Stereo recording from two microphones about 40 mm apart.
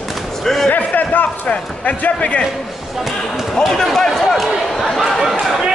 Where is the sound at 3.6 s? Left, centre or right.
Centre.